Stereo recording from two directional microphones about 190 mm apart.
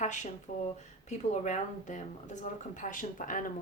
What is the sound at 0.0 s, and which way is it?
Speech, 40° left (ahead or behind).